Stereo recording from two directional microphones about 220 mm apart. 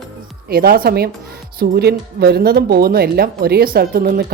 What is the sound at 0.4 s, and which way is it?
A woman's voice, 45° right (ahead or behind).